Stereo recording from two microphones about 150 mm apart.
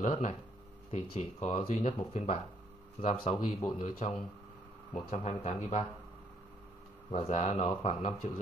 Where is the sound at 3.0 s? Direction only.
40° left (ahead or behind).